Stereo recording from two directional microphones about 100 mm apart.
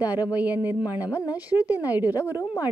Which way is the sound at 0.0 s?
15° right (ahead or behind).